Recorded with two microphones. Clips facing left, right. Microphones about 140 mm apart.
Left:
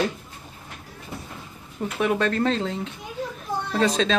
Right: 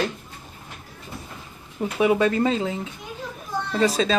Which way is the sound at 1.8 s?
10° right (ahead or behind).